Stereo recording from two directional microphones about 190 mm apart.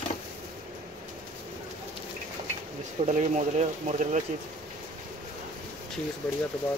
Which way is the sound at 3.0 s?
40° right (ahead or behind).